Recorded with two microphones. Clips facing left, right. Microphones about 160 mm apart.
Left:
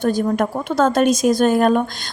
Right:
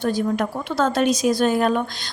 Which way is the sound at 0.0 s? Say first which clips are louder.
Left 3 dB; 45° left (ahead or behind).